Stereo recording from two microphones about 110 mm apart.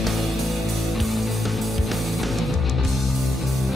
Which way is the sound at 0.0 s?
Centre (ahead or behind).